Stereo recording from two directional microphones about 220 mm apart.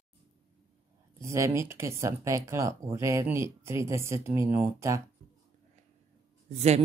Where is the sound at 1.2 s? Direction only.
15° right (ahead or behind).